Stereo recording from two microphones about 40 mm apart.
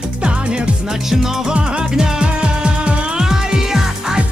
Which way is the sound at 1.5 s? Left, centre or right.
Right.